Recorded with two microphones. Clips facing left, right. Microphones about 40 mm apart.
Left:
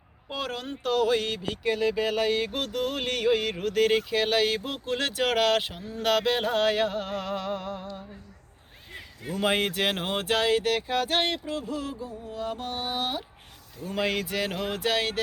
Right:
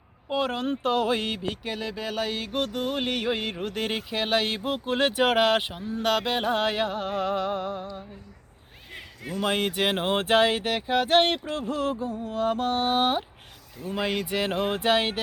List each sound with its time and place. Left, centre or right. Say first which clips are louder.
0.3 s speech: right 6 dB; centre
0.6 s speech: right 1 dB; right
1.4 s speech: left 4 dB; centre
9.2 s speech: left 1 dB; centre; by 13.2 s right
13.9 s speech: even; centre
14.3 s speech: right 3 dB; right